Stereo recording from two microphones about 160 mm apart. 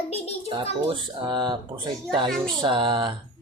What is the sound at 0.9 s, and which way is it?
Speech, 30° right (ahead or behind).